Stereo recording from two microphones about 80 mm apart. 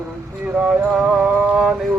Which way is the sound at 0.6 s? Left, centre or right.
Centre.